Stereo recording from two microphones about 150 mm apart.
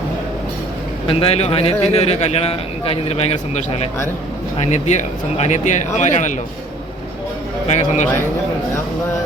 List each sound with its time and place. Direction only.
1.0 s a man's voice: 40° left (ahead or behind)
7.7 s a man's voice: 50° left (ahead or behind)